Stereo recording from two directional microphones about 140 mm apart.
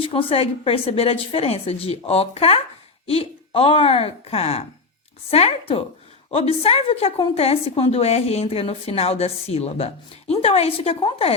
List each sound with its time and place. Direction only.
0.0 s a woman's voice: 40° left (ahead or behind)